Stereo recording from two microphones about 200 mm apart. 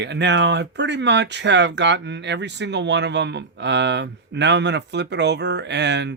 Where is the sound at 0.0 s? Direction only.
60° right (ahead or behind).